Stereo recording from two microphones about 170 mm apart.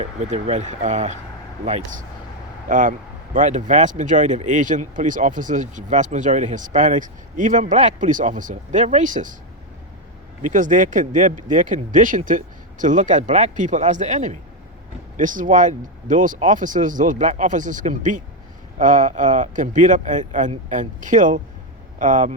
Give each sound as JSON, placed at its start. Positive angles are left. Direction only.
{"t": 0.0, "sound": "speech", "side_deg": -40}
{"t": 2.6, "sound": "speech", "side_deg": -50}
{"t": 10.4, "sound": "speech", "side_deg": -50}